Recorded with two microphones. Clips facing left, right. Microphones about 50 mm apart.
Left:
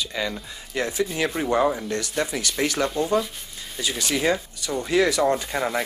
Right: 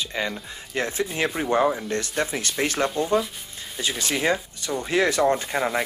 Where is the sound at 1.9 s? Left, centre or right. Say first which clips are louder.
Even; right.